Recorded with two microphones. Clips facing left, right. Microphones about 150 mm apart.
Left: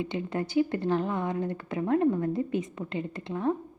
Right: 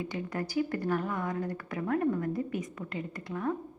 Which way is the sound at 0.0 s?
25° left (ahead or behind).